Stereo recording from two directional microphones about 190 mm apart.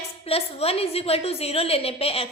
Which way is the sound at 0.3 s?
30° left (ahead or behind).